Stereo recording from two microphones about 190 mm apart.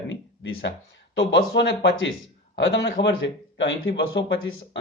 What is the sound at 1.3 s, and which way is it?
Speech, 75° left (ahead or behind).